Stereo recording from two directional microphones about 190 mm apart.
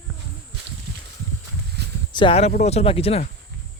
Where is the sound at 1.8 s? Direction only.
60° right (ahead or behind).